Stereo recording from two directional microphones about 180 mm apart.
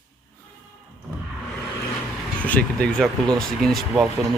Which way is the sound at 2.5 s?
5° left (ahead or behind).